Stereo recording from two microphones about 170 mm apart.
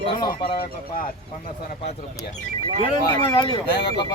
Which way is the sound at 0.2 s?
25° left (ahead or behind).